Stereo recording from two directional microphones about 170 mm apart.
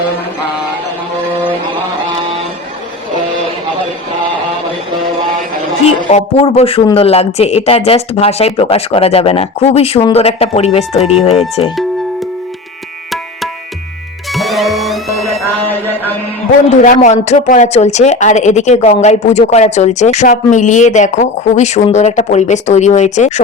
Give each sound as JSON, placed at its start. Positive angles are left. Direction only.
{"t": 6.1, "sound": "speech", "side_deg": 40}
{"t": 14.3, "sound": "music", "side_deg": 0}
{"t": 15.4, "sound": "a sound", "side_deg": 10}
{"t": 16.5, "sound": "speech", "side_deg": 50}